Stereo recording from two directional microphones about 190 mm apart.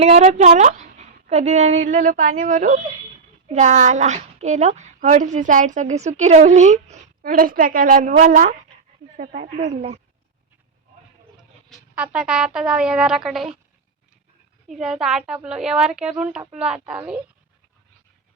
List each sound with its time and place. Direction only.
0.0 s a woman's voice: 35° right (ahead or behind)
11.7 s speech: 5° right (ahead or behind)
14.7 s speech: centre (ahead or behind)